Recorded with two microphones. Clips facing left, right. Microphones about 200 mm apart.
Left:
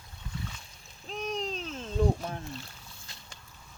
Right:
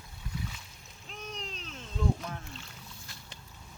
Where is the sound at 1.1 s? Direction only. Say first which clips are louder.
Left 9 dB; 40° left (ahead or behind).